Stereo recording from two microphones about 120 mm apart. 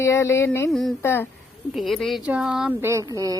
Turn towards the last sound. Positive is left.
turn(degrees=-25)  # may be behind; listen again after turning